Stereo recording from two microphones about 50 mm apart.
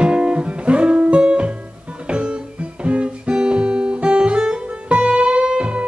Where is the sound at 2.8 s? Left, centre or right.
Right.